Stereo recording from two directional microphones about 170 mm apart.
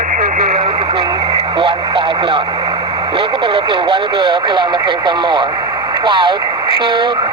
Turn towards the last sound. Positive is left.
turn(degrees=-30)  # may be behind; listen again after turning